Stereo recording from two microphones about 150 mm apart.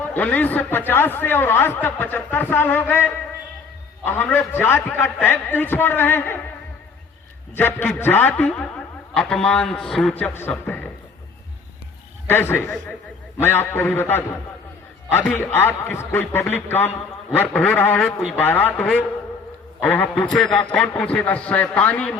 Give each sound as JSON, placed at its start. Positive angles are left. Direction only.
{"t": 0.0, "sound": "a man's voice", "side_deg": 10}
{"t": 7.5, "sound": "a man's voice", "side_deg": 15}
{"t": 10.5, "sound": "a sound", "side_deg": 5}
{"t": 12.3, "sound": "a man's voice", "side_deg": 15}